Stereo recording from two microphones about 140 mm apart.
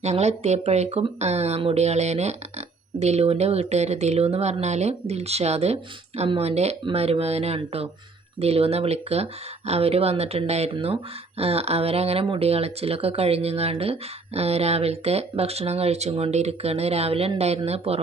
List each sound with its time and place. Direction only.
0.0 s speech: 50° right (ahead or behind)